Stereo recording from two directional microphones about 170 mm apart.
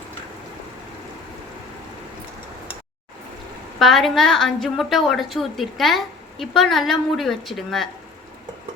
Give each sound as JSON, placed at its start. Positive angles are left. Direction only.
{"t": 3.8, "sound": "a woman's voice", "side_deg": 0}